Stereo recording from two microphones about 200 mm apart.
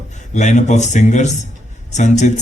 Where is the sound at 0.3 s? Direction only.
35° left (ahead or behind).